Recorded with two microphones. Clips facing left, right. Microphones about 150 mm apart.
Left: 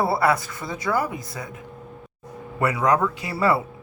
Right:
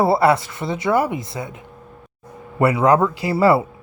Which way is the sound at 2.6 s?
30° right (ahead or behind).